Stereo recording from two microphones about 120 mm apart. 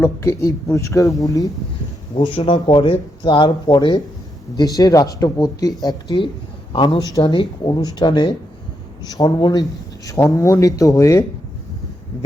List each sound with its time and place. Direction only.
0.0 s speech: 20° left (ahead or behind)
2.1 s speech: 45° left (ahead or behind)
9.0 s speech: 30° left (ahead or behind)